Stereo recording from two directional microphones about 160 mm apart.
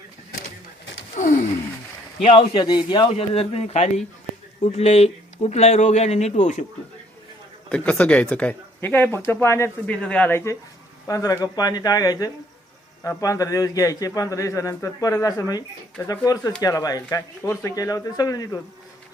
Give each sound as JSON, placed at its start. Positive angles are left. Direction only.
{"t": 1.1, "sound": "a sound", "side_deg": 55}
{"t": 2.2, "sound": "speech", "side_deg": 30}
{"t": 7.7, "sound": "a man's voice", "side_deg": 10}